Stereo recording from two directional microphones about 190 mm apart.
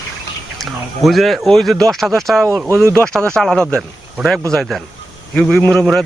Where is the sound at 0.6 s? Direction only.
Centre (ahead or behind).